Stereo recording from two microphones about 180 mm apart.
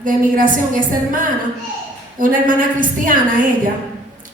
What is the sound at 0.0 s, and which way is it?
A woman's voice, 50° right (ahead or behind).